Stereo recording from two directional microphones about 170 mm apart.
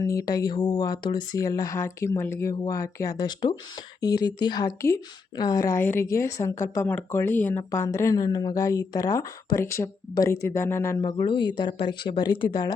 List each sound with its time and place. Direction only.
0.0 s a woman's voice: 20° left (ahead or behind)
11.2 s speech: 30° left (ahead or behind)